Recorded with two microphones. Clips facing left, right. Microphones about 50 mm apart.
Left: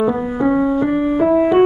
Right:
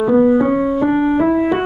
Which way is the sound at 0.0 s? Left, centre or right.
Centre.